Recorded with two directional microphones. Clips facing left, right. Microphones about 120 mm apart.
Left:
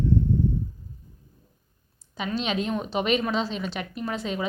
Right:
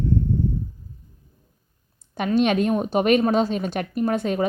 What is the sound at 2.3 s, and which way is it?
A woman's voice, 55° right (ahead or behind).